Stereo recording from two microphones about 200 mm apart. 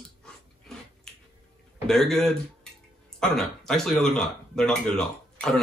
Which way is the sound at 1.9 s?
Centre (ahead or behind).